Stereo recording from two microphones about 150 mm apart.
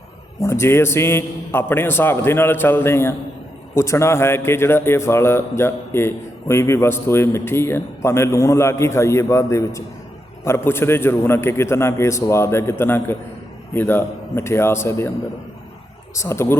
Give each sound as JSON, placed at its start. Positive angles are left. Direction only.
{"t": 0.4, "sound": "a man's voice", "side_deg": 15}
{"t": 16.1, "sound": "a man's voice", "side_deg": 20}